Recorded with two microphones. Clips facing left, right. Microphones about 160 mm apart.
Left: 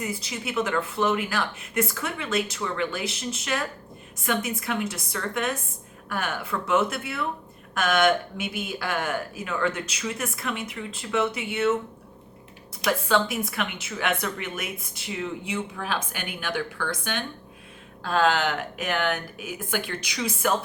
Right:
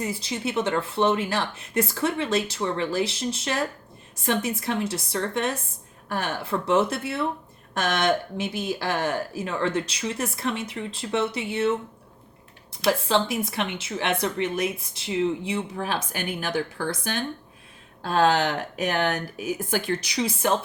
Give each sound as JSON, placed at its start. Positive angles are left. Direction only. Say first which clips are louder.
{"t": 0.0, "sound": "a woman's voice", "louder": "right 3 dB", "side_deg": -30}
{"t": 12.8, "sound": "a woman's voice", "louder": "right 1 dB", "side_deg": -30}